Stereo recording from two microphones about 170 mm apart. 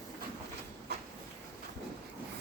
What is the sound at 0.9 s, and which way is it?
Train, 75° right (ahead or behind).